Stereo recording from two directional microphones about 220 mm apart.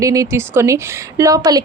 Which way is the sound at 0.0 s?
15° right (ahead or behind).